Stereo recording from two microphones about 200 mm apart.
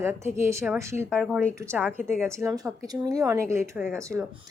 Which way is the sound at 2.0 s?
5° left (ahead or behind).